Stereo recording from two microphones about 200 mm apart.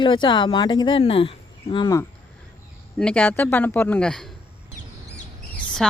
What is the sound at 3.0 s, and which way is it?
Speech, 5° left (ahead or behind).